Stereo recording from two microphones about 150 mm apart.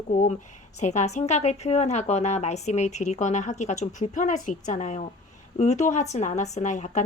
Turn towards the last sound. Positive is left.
turn(degrees=55)  # may be behind; listen again after turning